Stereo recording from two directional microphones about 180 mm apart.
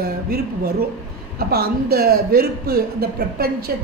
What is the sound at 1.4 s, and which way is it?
A man's voice, 60° right (ahead or behind).